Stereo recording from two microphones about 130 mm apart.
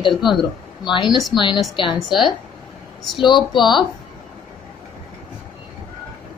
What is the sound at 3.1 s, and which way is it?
Speech, 35° left (ahead or behind).